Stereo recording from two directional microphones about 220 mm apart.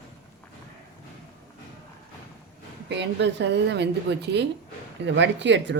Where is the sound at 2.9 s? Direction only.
50° right (ahead or behind).